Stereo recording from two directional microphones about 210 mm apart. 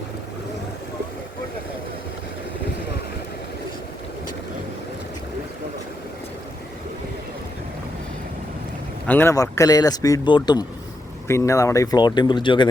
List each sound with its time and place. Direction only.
9.0 s speech: 10° left (ahead or behind)